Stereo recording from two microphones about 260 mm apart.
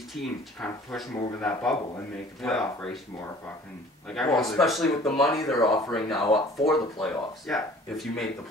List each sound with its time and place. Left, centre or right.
0.1 s speech: centre
4.1 s speech: centre
5.3 s speech: centre
5.9 s speech: centre
6.2 s speech: left
7.0 s speech: centre